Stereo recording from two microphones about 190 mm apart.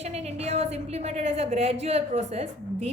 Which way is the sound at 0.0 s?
35° right (ahead or behind).